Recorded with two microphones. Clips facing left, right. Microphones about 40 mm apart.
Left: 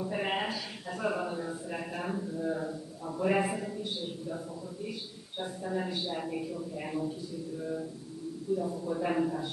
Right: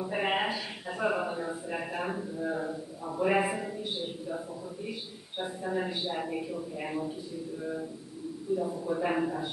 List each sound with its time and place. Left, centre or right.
0.0 s a sound: centre
5.4 s a man's voice: centre
8.5 s a man's voice: centre